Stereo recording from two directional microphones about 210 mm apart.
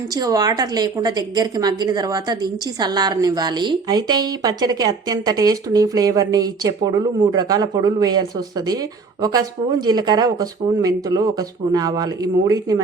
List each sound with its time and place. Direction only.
0.1 s a woman's voice: 15° right (ahead or behind)